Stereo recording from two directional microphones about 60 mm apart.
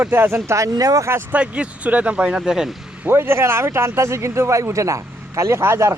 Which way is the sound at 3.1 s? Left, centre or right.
Right.